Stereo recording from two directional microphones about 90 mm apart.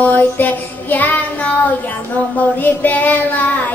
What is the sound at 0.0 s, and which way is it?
Child singing, 20° left (ahead or behind).